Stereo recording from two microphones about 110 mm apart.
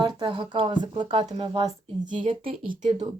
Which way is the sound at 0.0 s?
50° right (ahead or behind).